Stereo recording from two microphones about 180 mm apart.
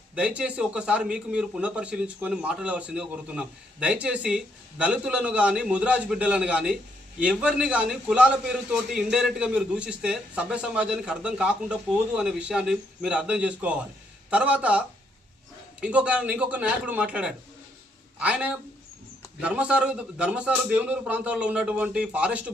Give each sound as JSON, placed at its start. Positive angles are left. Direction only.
{"t": 0.2, "sound": "a man's voice", "side_deg": -5}